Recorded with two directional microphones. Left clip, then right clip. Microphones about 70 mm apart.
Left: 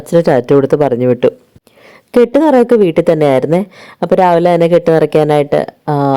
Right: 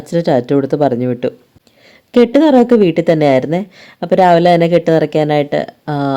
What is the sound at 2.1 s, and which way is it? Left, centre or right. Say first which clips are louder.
A woman's voice: left 1 dB; left.